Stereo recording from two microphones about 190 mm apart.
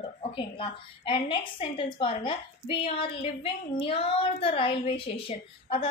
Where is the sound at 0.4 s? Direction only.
25° left (ahead or behind).